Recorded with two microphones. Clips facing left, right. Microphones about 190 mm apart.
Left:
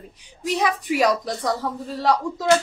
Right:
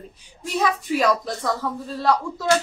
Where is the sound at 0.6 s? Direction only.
15° left (ahead or behind).